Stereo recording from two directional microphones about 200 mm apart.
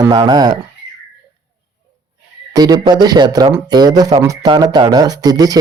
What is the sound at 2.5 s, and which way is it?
Speech, 20° right (ahead or behind).